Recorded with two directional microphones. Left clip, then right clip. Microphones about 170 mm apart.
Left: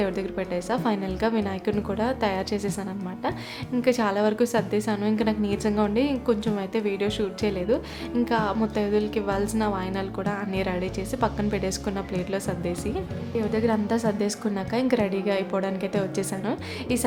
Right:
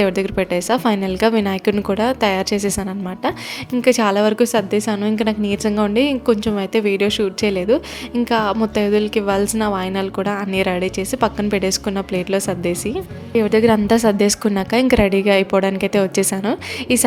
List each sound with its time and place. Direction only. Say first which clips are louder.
0.0 s a woman's voice: right 10 dB; 40° right (ahead or behind)